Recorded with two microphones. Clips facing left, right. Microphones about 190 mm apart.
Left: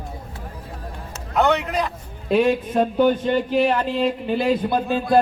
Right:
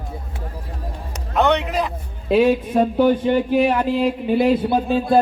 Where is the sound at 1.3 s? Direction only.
Centre (ahead or behind).